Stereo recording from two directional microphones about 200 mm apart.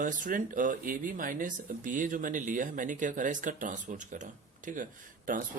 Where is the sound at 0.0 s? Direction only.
40° right (ahead or behind).